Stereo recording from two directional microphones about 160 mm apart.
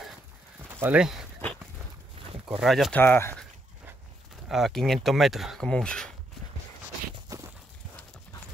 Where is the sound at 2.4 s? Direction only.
5° right (ahead or behind).